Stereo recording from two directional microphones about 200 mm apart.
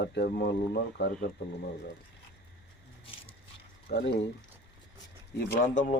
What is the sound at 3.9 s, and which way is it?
Speech, 55° left (ahead or behind).